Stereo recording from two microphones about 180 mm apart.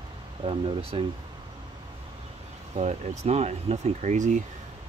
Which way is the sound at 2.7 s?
35° right (ahead or behind).